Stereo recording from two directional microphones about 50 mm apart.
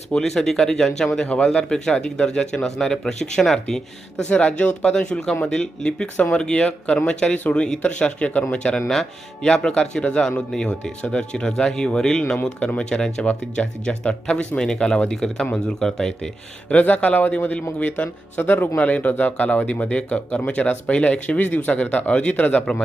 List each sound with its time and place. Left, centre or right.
0.2 s speech: centre
4.2 s speech: left
8.3 s a man's voice: left
8.5 s speech: centre
12.5 s speech: left
15.1 s speech: centre
16.6 s a man's voice: left
22.7 s speech: centre